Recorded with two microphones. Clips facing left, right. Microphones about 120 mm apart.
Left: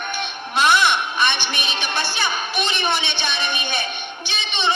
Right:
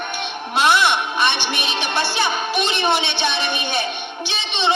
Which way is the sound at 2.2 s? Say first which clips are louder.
Right 3 dB; 30° right (ahead or behind).